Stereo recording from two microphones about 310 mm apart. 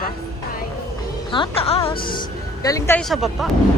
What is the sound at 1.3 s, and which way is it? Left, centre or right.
A woman's voice, centre.